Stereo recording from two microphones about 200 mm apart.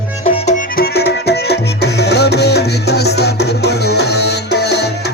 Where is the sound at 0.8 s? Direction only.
55° left (ahead or behind).